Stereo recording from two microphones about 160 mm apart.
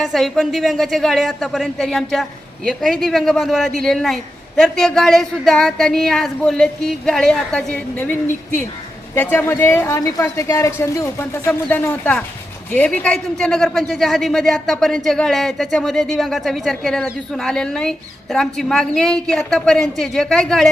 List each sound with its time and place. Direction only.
0.0 s speech: centre (ahead or behind)
9.1 s a woman's voice: 10° left (ahead or behind)